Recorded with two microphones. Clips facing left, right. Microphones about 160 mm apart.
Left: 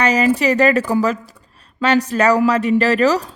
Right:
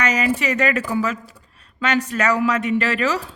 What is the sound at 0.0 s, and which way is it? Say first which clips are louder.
Speech: left 5 dB; 35° left (ahead or behind).